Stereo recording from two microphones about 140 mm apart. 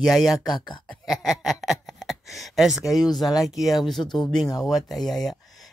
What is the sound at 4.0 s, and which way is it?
Speech, 30° left (ahead or behind).